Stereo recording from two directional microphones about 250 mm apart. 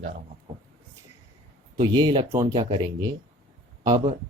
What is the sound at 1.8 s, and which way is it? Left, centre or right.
Speech, centre.